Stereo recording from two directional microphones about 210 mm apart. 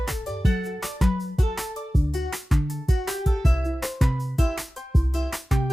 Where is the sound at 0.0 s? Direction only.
Centre (ahead or behind).